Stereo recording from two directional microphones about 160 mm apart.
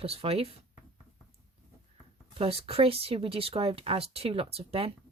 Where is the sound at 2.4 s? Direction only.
35° right (ahead or behind).